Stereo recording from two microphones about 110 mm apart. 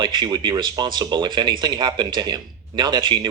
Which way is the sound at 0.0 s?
40° right (ahead or behind).